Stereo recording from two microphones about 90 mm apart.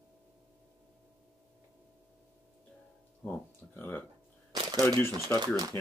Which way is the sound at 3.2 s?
20° left (ahead or behind).